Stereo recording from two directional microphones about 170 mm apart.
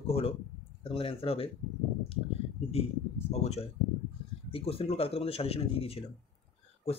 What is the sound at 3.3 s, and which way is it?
Speech, 40° left (ahead or behind).